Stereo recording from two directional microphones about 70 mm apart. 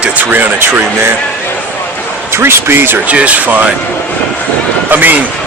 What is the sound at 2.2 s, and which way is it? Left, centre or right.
Speech, right.